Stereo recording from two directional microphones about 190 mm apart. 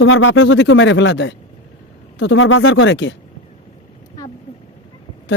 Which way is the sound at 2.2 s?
85° left.